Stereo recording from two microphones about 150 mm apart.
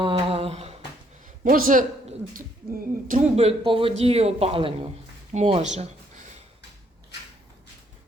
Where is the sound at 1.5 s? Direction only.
70° right (ahead or behind).